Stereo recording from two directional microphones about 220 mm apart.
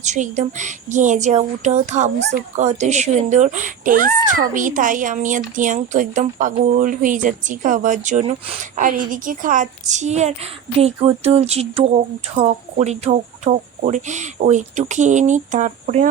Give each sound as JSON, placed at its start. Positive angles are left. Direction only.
{"t": 0.0, "sound": "speech", "side_deg": -30}